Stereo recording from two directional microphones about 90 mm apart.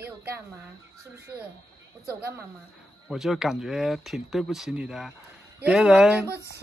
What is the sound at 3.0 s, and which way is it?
Speech, 5° right (ahead or behind).